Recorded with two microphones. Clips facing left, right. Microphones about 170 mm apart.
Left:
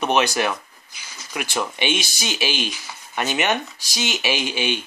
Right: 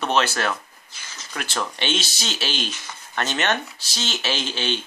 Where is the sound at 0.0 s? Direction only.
15° left (ahead or behind).